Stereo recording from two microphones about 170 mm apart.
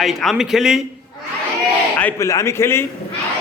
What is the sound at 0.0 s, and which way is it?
Speech, centre (ahead or behind).